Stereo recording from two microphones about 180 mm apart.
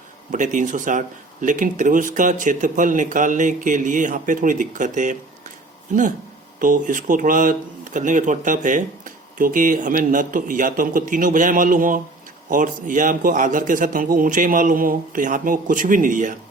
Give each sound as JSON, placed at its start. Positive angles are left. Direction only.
{"t": 0.3, "sound": "speech", "side_deg": -45}